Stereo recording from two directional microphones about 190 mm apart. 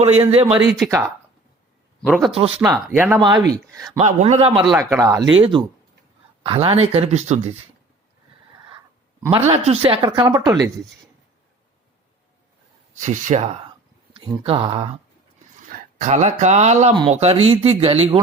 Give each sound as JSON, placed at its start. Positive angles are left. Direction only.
{"t": 0.3, "sound": "speech", "side_deg": -30}
{"t": 0.9, "sound": "speech", "side_deg": -15}
{"t": 2.0, "sound": "speech", "side_deg": 0}
{"t": 2.3, "sound": "speech", "side_deg": -30}
{"t": 2.7, "sound": "speech", "side_deg": -10}
{"t": 3.2, "sound": "speech", "side_deg": -25}
{"t": 3.9, "sound": "speech", "side_deg": -35}
{"t": 4.8, "sound": "speech", "side_deg": -15}
{"t": 9.3, "sound": "speech", "side_deg": -30}
{"t": 13.0, "sound": "speech", "side_deg": -40}
{"t": 14.4, "sound": "speech", "side_deg": -25}
{"t": 15.7, "sound": "speech", "side_deg": -40}